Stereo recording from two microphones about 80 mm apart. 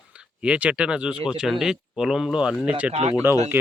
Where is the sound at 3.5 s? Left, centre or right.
Right.